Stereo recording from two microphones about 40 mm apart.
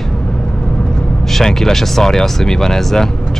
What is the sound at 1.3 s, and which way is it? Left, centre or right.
Speech, centre.